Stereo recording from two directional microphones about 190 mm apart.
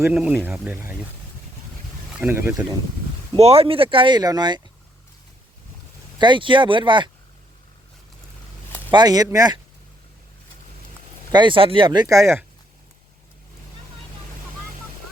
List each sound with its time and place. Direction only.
0.0 s speech: 5° right (ahead or behind)
2.1 s speech: 10° right (ahead or behind)
3.3 s speech: 30° right (ahead or behind)
6.1 s speech: 25° right (ahead or behind)
8.9 s speech: 20° right (ahead or behind)
11.3 s speech: 25° right (ahead or behind)